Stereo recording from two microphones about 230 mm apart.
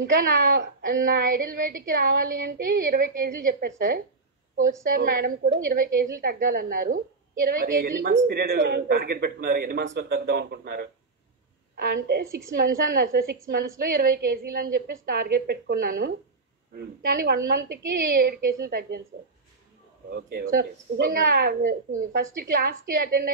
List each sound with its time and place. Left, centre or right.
0.2 s a woman's voice: right
20.1 s a woman's voice: right